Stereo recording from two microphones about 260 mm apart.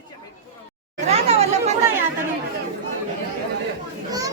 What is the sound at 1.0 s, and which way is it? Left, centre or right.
Chatter, right.